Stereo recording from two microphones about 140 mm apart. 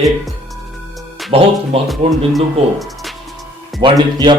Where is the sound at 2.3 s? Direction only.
Centre (ahead or behind).